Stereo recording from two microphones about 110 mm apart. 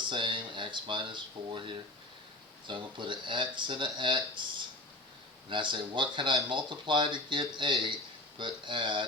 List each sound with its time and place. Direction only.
0.0 s speech: 50° right (ahead or behind)
5.5 s speech: 50° right (ahead or behind)